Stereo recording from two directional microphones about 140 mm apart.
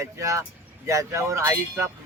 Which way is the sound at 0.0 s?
20° right (ahead or behind).